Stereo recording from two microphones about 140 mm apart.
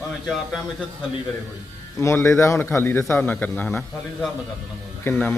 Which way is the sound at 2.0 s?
20° left (ahead or behind).